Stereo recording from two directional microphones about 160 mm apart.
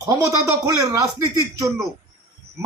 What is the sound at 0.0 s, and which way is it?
Speech, 20° right (ahead or behind).